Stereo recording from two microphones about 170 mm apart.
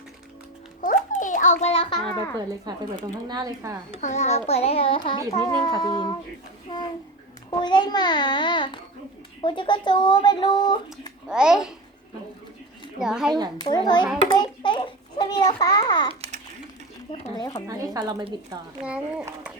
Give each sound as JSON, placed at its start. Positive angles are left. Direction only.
{"t": 0.8, "sound": "a sound", "side_deg": 50}
{"t": 2.6, "sound": "speech", "side_deg": -25}
{"t": 4.0, "sound": "a child's voice", "side_deg": 40}
{"t": 7.6, "sound": "a woman's voice", "side_deg": 25}
{"t": 11.3, "sound": "a child's voice", "side_deg": -5}
{"t": 13.0, "sound": "a child's voice", "side_deg": -5}
{"t": 13.6, "sound": "a woman's voice", "side_deg": 25}
{"t": 17.3, "sound": "a woman's voice", "side_deg": 25}
{"t": 17.7, "sound": "speech", "side_deg": -20}
{"t": 18.9, "sound": "speech", "side_deg": -10}